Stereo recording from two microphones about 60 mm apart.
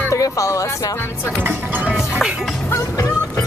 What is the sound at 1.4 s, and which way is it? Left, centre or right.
Speech, right.